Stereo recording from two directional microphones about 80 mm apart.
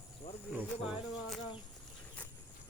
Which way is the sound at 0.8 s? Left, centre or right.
Centre.